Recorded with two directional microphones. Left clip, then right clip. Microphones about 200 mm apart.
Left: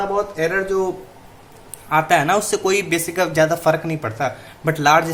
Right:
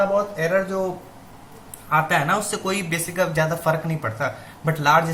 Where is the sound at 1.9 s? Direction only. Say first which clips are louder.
Left 4 dB; 55° left (ahead or behind).